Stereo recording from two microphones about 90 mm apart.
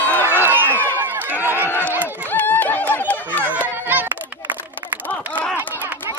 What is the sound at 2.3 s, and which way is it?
Snicker, 20° left (ahead or behind).